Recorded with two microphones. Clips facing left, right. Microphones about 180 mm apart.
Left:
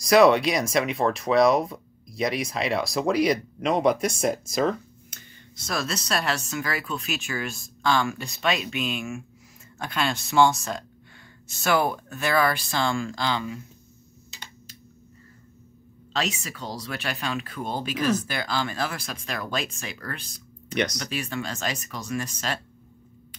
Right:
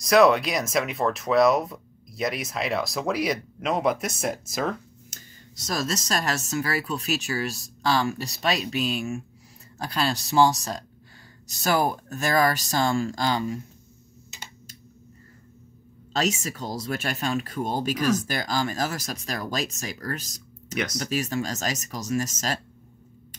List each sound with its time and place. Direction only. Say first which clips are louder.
0.0 s speech: left 1 dB; centre (ahead or behind)
5.7 s speech: right 1 dB; 40° right (ahead or behind)
16.1 s speech: right 3 dB; 40° right (ahead or behind)